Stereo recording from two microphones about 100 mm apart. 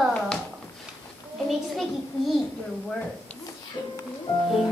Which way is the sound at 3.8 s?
50° left (ahead or behind).